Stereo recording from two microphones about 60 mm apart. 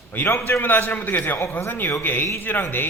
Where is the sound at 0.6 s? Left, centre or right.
Left.